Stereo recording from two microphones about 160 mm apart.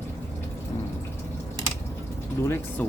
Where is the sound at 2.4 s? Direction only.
15° left (ahead or behind).